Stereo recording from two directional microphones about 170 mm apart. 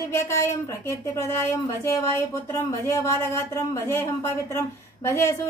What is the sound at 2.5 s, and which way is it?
A woman's voice, 15° left (ahead or behind).